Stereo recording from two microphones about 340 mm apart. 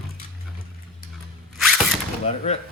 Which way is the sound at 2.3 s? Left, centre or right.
Centre.